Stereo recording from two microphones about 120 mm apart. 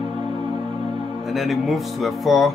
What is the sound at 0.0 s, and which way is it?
Music, 40° right (ahead or behind).